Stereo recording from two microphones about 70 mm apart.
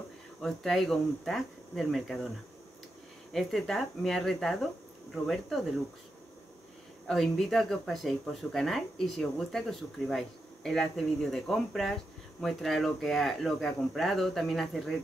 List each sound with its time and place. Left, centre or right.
0.4 s speech: centre
3.3 s speech: centre
7.1 s speech: centre